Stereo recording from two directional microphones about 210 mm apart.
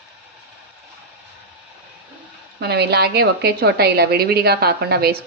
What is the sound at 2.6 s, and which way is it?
A woman's voice, 50° right (ahead or behind).